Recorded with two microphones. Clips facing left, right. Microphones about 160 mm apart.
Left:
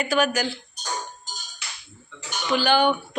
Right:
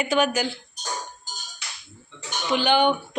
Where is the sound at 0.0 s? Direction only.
20° right (ahead or behind).